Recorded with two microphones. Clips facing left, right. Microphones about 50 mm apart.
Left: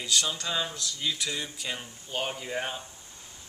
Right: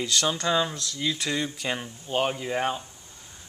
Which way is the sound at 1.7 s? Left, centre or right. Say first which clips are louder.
Right 6 dB; right.